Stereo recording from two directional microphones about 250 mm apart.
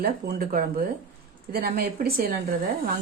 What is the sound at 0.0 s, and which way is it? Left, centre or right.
A woman's voice, right.